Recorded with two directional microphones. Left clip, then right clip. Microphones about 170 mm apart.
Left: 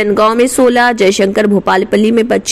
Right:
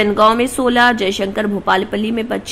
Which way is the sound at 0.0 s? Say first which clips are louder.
Left 3 dB; 30° left (ahead or behind).